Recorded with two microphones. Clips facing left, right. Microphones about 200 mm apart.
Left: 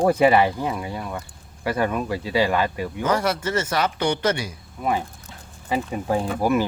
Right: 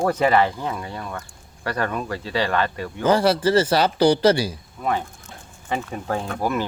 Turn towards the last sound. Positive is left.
turn(degrees=10)  # may be behind; listen again after turning